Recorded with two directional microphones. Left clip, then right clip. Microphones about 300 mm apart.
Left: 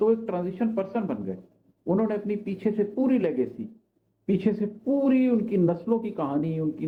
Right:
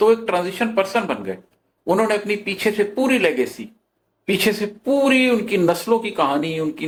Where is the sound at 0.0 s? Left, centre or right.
Centre.